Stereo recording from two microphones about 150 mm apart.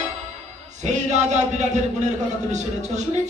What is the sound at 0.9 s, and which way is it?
Speech, 50° right (ahead or behind).